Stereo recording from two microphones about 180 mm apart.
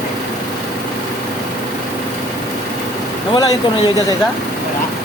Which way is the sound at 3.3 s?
25° left (ahead or behind).